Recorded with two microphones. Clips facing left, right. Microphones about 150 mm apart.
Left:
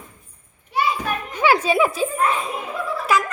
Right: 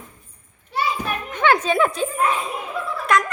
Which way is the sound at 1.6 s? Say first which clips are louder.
Left 1 dB; 5° left (ahead or behind).